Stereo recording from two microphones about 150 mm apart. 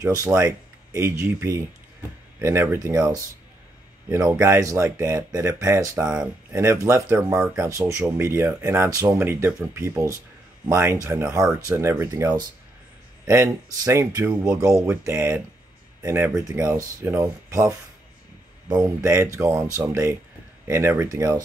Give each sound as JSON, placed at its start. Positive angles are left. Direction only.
{"t": 0.0, "sound": "speech", "side_deg": -20}